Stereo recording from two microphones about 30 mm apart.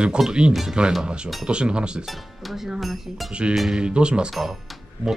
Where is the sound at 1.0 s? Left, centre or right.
Right.